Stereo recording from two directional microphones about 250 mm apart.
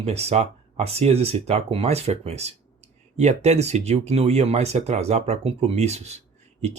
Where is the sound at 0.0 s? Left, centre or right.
Right.